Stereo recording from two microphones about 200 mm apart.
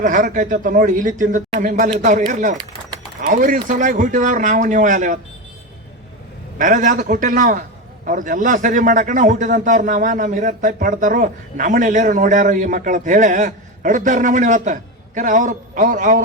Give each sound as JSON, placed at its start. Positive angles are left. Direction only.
{"t": 0.0, "sound": "a man's voice", "side_deg": -40}
{"t": 6.6, "sound": "a man's voice", "side_deg": -40}